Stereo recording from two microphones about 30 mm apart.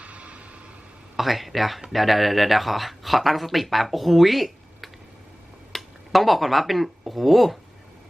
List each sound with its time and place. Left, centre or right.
0.0 s vehicle: right
1.1 s speech: centre